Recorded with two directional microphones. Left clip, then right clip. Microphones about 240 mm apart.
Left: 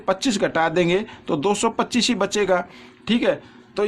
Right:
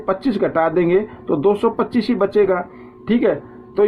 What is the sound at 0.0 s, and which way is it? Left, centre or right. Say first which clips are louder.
Speech: right 2 dB; left.